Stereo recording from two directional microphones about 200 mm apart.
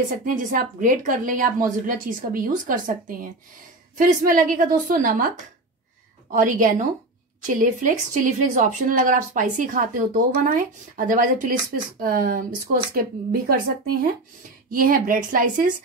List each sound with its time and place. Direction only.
0.2 s a woman's voice: 40° right (ahead or behind)
6.3 s a woman's voice: 40° right (ahead or behind)
14.7 s a woman's voice: 45° right (ahead or behind)